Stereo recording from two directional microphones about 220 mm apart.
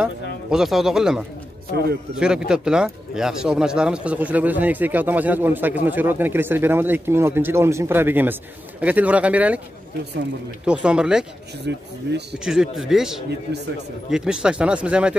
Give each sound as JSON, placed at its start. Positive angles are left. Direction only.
{"t": 0.0, "sound": "speech", "side_deg": 0}
{"t": 10.6, "sound": "speech", "side_deg": -5}
{"t": 11.6, "sound": "speech", "side_deg": -50}
{"t": 12.4, "sound": "speech", "side_deg": 0}